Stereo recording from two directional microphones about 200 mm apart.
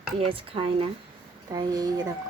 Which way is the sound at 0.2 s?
25° right (ahead or behind).